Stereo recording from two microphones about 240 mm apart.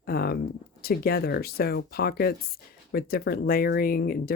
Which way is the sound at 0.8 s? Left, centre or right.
Left.